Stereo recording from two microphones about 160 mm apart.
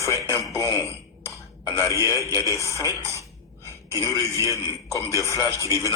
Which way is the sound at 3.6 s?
20° right (ahead or behind).